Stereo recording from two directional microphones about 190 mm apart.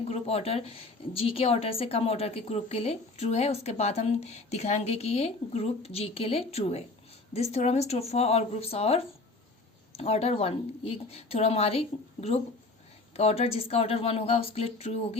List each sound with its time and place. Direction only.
0.1 s speech: 35° left (ahead or behind)